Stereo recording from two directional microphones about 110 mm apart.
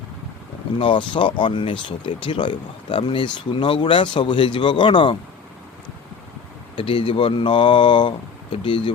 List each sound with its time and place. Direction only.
0.8 s speech: 50° left (ahead or behind)
6.7 s speech: 55° left (ahead or behind)